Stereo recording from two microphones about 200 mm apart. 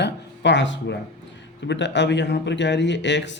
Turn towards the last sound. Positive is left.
turn(degrees=60)  # may be behind; listen again after turning